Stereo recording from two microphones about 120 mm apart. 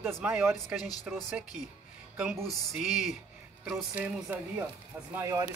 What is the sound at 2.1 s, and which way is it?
Speech, 5° right (ahead or behind).